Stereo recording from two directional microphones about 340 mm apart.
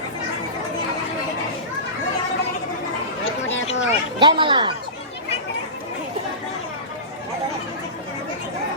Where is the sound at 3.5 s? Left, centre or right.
Left.